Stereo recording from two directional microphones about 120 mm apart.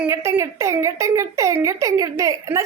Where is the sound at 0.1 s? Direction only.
20° right (ahead or behind).